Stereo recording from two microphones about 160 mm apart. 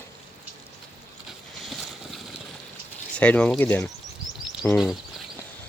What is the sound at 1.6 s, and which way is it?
Boat, centre (ahead or behind).